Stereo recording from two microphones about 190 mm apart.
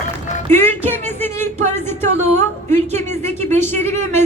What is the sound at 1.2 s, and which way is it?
A woman's voice, 10° left (ahead or behind).